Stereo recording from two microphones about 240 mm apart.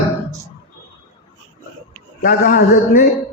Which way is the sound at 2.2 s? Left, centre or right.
Left.